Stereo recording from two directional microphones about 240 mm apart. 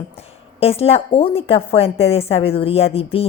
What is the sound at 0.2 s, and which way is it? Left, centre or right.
A woman's voice, left.